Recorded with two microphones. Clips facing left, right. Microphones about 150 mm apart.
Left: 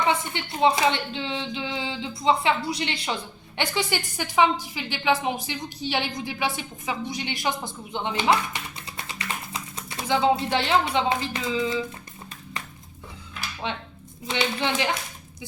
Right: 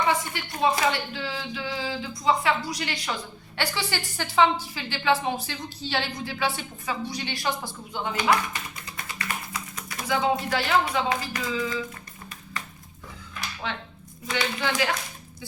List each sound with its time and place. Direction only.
0.3 s a woman's voice: 25° left (ahead or behind)
13.6 s speech: 25° left (ahead or behind)